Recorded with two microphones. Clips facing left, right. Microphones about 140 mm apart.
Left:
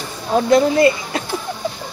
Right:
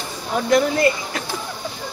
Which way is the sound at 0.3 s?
25° left (ahead or behind).